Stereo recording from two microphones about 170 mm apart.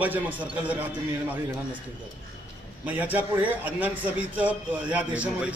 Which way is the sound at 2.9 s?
10° right (ahead or behind).